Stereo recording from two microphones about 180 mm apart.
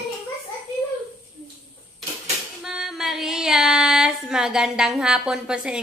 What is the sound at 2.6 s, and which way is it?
Female singing, centre (ahead or behind).